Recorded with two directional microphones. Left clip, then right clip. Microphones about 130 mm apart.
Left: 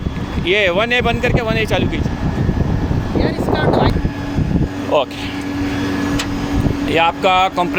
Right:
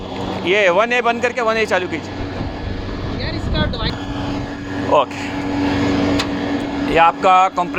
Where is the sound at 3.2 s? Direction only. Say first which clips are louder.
Left 6 dB; 80° left.